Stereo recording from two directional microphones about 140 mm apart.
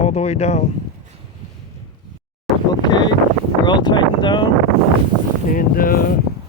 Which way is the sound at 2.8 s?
30° left (ahead or behind).